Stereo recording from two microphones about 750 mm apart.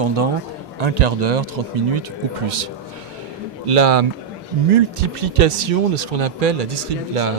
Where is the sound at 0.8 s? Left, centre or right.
Right.